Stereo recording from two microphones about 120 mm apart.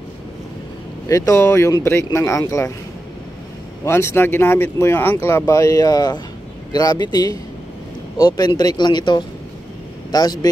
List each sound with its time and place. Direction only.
1.0 s speech: 25° left (ahead or behind)
3.8 s speech: 20° left (ahead or behind)